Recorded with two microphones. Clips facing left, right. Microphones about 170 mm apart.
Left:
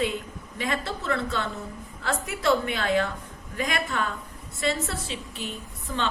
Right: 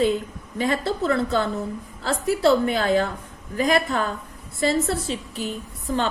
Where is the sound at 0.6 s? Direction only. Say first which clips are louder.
Right 7 dB; 35° right (ahead or behind).